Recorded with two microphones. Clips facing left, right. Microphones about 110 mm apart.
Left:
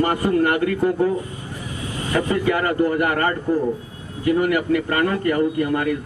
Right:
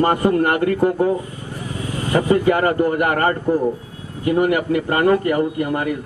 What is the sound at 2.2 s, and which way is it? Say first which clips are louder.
A man's voice: right 6 dB; 35° right (ahead or behind).